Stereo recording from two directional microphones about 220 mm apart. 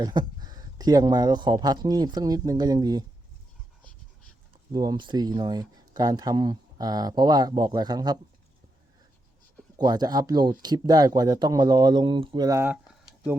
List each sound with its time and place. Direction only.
0.0 s speech: 20° right (ahead or behind)
4.7 s speech: 20° right (ahead or behind)
9.7 s speech: 20° right (ahead or behind)